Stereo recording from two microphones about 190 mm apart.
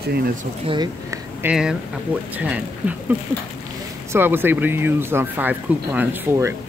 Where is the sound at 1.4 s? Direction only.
5° right (ahead or behind).